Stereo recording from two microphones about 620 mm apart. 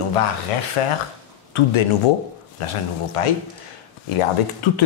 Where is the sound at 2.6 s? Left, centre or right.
Left.